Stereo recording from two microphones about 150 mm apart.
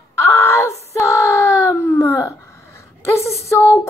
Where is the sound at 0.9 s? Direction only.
20° left (ahead or behind).